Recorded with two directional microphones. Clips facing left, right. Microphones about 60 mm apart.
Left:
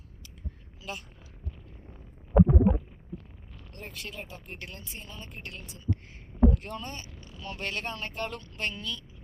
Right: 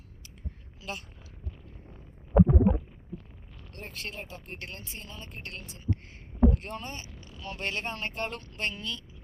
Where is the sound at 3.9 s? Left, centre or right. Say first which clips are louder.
Right 3 dB; right.